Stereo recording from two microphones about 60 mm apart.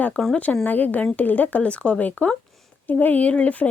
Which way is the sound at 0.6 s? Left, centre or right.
Left.